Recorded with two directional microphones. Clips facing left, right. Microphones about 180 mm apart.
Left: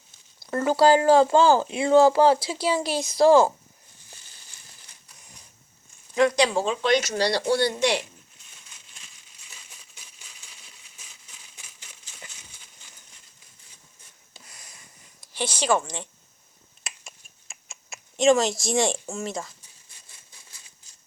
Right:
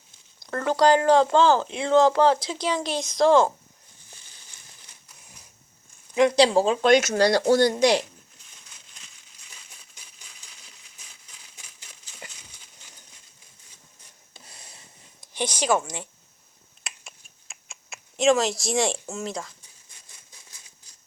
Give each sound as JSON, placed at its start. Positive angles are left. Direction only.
{"t": 0.3, "sound": "speech", "side_deg": 5}
{"t": 6.1, "sound": "speech", "side_deg": -25}
{"t": 14.4, "sound": "a sound", "side_deg": -30}
{"t": 16.8, "sound": "finger snapping", "side_deg": 0}